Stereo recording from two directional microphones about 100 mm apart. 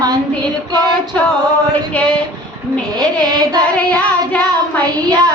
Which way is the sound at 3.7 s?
15° left (ahead or behind).